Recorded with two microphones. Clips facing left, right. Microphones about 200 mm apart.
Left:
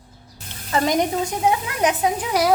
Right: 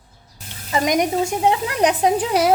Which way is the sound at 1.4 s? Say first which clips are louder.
Right 1 dB; 30° right (ahead or behind).